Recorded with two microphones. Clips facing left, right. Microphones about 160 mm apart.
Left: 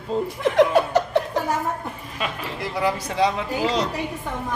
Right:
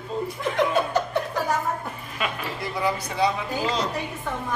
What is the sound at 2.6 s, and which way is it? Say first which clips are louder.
Speech: left 3 dB; 90° left.